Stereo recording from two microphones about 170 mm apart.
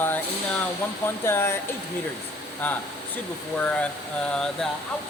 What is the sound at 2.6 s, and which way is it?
Speech, 10° left (ahead or behind).